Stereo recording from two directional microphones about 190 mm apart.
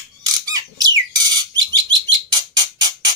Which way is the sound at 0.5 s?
20° right (ahead or behind).